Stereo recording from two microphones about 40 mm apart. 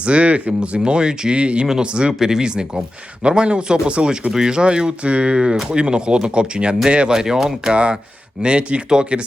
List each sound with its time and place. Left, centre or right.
0.0 s speech: right
0.8 s speech: right
2.1 s speech: centre
7.1 s speech: centre
7.7 s speech: right